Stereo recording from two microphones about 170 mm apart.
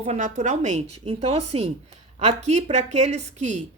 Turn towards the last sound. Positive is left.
turn(degrees=-40)  # may be behind; listen again after turning